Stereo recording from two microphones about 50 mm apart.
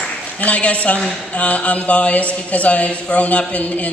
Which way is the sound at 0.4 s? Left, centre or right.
Left.